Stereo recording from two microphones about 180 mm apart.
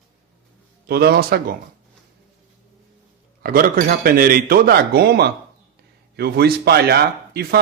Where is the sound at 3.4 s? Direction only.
55° right (ahead or behind).